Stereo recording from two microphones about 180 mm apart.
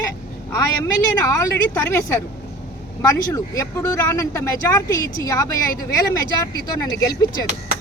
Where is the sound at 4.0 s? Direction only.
15° left (ahead or behind).